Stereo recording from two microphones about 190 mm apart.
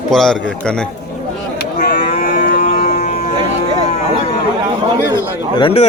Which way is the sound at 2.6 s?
40° left (ahead or behind).